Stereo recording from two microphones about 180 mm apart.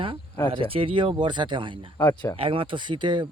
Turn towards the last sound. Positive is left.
turn(degrees=-25)  # may be behind; listen again after turning